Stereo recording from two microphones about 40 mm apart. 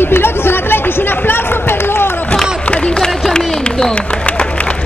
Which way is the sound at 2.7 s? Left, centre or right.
Left.